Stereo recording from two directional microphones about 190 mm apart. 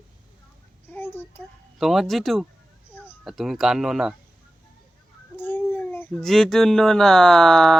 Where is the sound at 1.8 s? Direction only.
Centre (ahead or behind).